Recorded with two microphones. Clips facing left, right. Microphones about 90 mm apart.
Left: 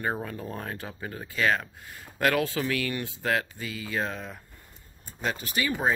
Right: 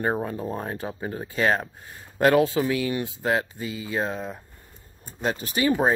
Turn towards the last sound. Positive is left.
turn(degrees=-40)  # may be behind; listen again after turning